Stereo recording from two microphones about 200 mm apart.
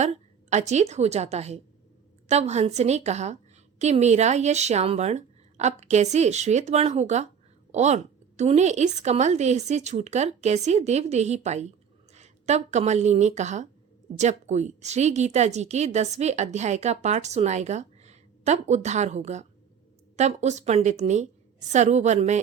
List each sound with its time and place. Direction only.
0.5 s a woman's voice: 35° right (ahead or behind)